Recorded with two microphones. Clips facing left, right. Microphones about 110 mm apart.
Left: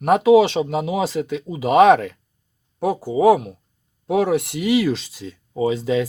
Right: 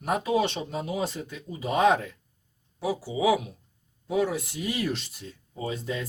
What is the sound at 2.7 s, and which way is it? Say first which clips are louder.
Speech: left 9 dB; 50° left (ahead or behind).